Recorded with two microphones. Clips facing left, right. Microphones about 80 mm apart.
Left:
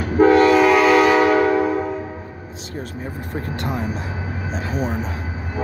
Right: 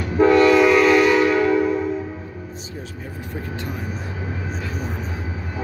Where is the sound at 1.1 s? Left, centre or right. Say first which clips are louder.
Left 2 dB; left.